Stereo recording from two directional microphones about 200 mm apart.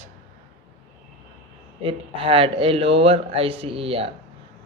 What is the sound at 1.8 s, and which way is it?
A man's voice, 25° right (ahead or behind).